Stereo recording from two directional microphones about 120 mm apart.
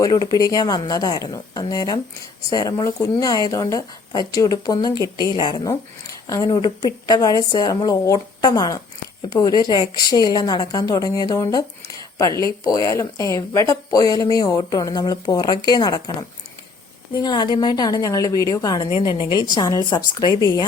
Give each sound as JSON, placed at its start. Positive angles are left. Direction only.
{"t": 0.0, "sound": "speech", "side_deg": 30}
{"t": 6.2, "sound": "speech", "side_deg": 30}
{"t": 17.2, "sound": "speech", "side_deg": 40}